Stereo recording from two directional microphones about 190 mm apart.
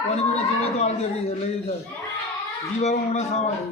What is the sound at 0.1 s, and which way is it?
Speech, 35° left (ahead or behind).